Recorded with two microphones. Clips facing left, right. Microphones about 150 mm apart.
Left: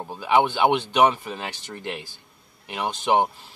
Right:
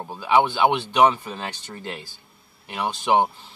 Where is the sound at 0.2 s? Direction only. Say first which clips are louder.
Right 1 dB; 15° left (ahead or behind).